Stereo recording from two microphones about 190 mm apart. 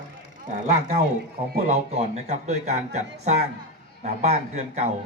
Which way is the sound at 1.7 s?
35° right (ahead or behind).